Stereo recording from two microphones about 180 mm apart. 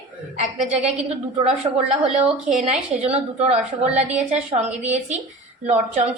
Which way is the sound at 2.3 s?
40° right (ahead or behind).